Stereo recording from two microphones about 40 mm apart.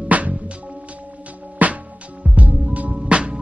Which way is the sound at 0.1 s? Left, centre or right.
Right.